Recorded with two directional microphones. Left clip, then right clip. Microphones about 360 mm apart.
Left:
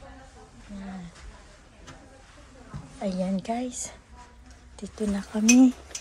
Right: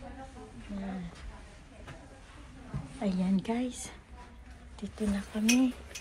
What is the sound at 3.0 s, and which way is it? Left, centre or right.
A child's voice, centre.